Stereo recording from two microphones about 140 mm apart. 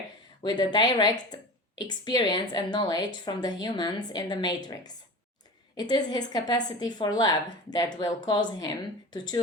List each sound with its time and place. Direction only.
0.4 s a woman's voice: 30° left (ahead or behind)